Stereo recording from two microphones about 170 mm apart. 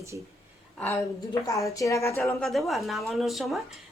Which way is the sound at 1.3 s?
20° left (ahead or behind).